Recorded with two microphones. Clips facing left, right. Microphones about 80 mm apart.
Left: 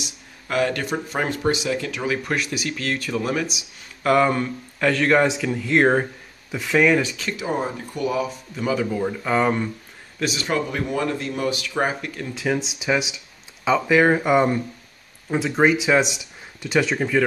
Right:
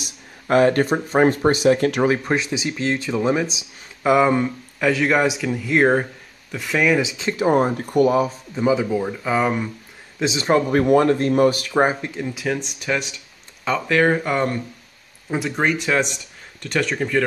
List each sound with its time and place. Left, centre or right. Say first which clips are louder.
0.0 s speech: even; right
2.0 s speech: right 4 dB; right; by 7.0 s centre
7.0 s speech: right 2 dB; right
7.5 s speech: right 9 dB; right
8.5 s speech: right 4 dB; centre
10.1 s a man's voice: right 6 dB; right
10.7 s speech: right 9 dB; right
11.8 s speech: right 5 dB; right
12.4 s speech: left 5 dB; centre
15.2 s speech: left 3 dB; centre